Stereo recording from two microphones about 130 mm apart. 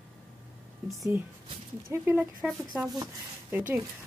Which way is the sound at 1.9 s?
20° right (ahead or behind).